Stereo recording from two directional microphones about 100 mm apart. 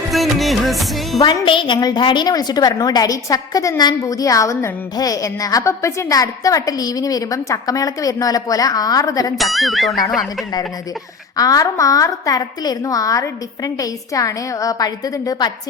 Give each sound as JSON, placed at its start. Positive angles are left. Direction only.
{"t": 0.1, "sound": "music", "side_deg": 0}
{"t": 1.5, "sound": "a woman's voice", "side_deg": 55}
{"t": 9.4, "sound": "speech", "side_deg": 0}
{"t": 11.3, "sound": "a woman's voice", "side_deg": 35}